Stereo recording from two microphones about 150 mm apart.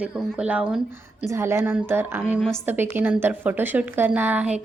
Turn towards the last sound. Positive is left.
turn(degrees=-10)  # may be behind; listen again after turning